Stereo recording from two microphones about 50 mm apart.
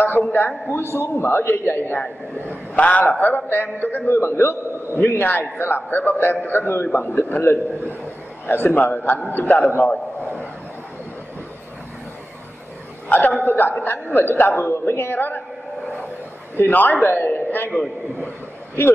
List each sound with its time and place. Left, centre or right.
0.2 s a man's voice: left
0.7 s a man's voice: left
4.1 s a man's voice: left
13.1 s a man's voice: left
16.5 s a man's voice: left